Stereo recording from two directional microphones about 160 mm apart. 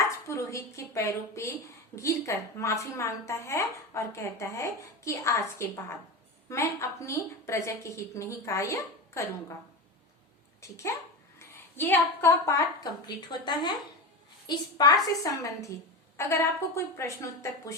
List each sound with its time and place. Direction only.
0.3 s a woman's voice: 20° left (ahead or behind)
10.6 s a woman's voice: 20° left (ahead or behind)